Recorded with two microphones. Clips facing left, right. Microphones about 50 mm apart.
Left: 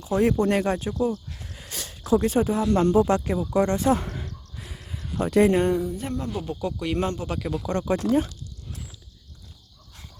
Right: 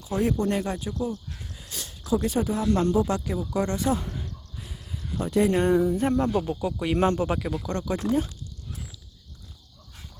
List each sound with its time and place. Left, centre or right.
0.0 s speech: left
0.9 s speech: left
1.5 s a sound: left
2.2 s speech: left
3.5 s speech: left
3.8 s speech: left
4.0 s a sound: left
4.7 s a sound: left
5.5 s speech: centre
5.8 s a sound: right
6.4 s speech: centre
7.3 s speech: centre
7.7 s speech: left